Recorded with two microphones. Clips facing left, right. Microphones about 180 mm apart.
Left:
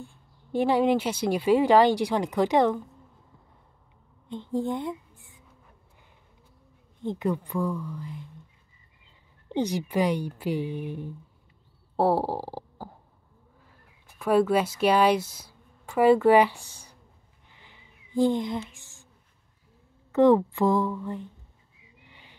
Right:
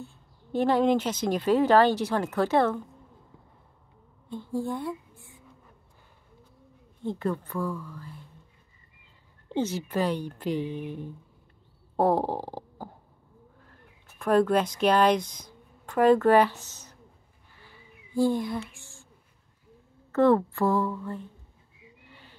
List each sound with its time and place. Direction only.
0.0 s speech: 15° left (ahead or behind)
4.3 s a woman's voice: 20° left (ahead or behind)
7.0 s speech: 15° left (ahead or behind)
9.5 s speech: 15° left (ahead or behind)
12.0 s stomach rumble: 10° left (ahead or behind)
13.7 s speech: 5° left (ahead or behind)
17.6 s a sound: 20° left (ahead or behind)
20.1 s speech: 15° left (ahead or behind)
22.0 s a sound: 15° left (ahead or behind)